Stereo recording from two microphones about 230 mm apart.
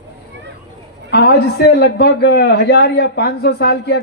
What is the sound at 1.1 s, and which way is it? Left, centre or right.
Speech, left.